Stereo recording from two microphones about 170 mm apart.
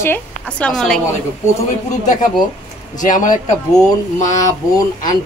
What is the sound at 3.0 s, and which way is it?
Speech, 50° left (ahead or behind).